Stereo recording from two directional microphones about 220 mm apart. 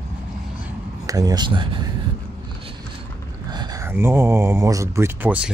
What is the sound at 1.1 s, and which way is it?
Speech, 15° right (ahead or behind).